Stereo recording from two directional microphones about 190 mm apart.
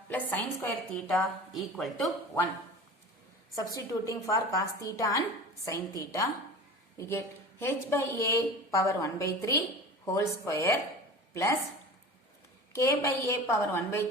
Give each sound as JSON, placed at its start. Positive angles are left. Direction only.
{"t": 0.1, "sound": "a woman's voice", "side_deg": 10}
{"t": 3.5, "sound": "a woman's voice", "side_deg": 15}
{"t": 12.7, "sound": "a woman's voice", "side_deg": 15}